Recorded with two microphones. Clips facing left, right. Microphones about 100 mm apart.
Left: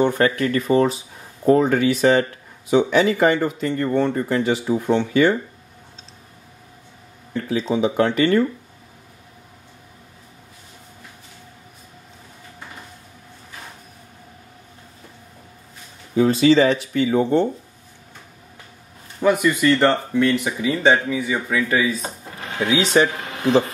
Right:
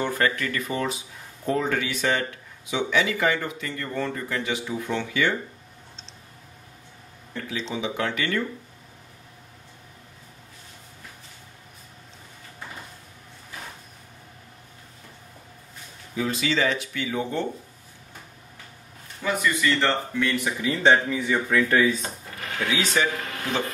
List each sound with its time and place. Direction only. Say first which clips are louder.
0.0 s speech: left 7 dB; 25° left (ahead or behind)
7.4 s speech: left 10 dB; 40° left (ahead or behind)
16.2 s speech: left 11 dB; 35° left (ahead or behind)
19.2 s speech: left 8 dB; 10° left (ahead or behind)
22.0 s drawer open or close: left 3 dB; 25° left (ahead or behind)
23.2 s a sound: left 11 dB; 25° left (ahead or behind)